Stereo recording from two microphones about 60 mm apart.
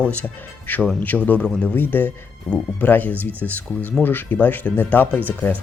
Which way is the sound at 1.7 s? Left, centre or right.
Left.